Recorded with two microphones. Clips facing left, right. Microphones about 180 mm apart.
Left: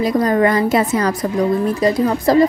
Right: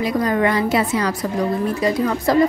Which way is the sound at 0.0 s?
40° left (ahead or behind).